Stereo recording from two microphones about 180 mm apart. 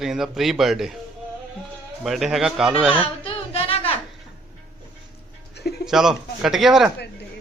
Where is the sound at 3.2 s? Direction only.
30° left (ahead or behind).